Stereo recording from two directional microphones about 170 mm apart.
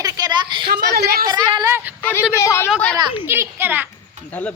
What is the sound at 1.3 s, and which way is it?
Speech, 25° right (ahead or behind).